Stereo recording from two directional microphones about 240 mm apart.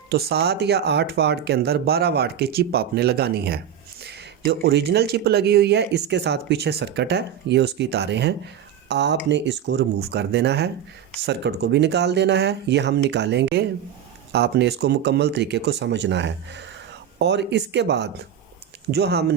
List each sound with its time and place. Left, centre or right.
0.1 s speech: right